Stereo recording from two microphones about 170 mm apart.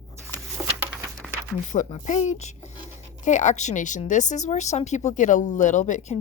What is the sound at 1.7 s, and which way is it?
A woman's voice, 45° left (ahead or behind).